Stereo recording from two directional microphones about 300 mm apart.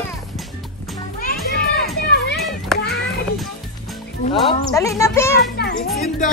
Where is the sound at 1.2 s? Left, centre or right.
Left.